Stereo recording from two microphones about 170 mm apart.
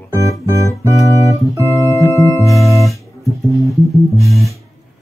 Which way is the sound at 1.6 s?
20° left (ahead or behind).